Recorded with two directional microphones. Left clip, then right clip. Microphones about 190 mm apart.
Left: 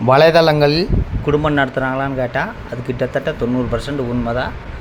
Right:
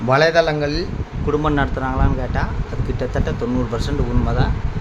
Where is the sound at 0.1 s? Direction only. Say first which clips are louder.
Left 5 dB; 20° left (ahead or behind).